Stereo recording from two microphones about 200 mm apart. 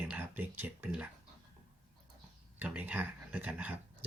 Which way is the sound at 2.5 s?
10° right (ahead or behind).